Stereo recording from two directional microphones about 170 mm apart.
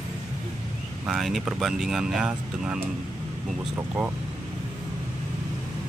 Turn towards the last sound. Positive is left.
turn(degrees=-10)  # may be behind; listen again after turning